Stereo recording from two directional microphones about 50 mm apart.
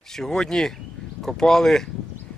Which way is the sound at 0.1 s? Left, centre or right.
Centre.